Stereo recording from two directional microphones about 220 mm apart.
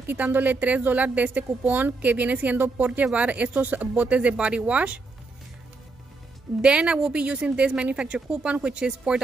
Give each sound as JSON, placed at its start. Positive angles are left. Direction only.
{"t": 0.0, "sound": "speech", "side_deg": -10}
{"t": 6.6, "sound": "a woman's voice", "side_deg": -5}